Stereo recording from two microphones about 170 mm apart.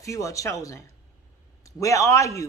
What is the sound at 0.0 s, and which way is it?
Speech, 20° left (ahead or behind).